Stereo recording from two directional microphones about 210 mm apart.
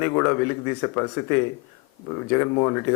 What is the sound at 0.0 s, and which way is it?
A man's voice, 15° left (ahead or behind).